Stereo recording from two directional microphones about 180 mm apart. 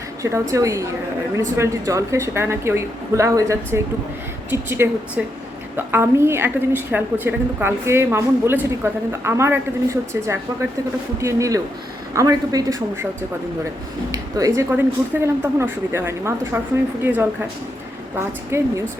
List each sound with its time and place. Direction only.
0.2 s a woman's voice: 15° right (ahead or behind)
14.1 s a woman's voice: 20° right (ahead or behind)
18.5 s a woman's voice: 15° right (ahead or behind)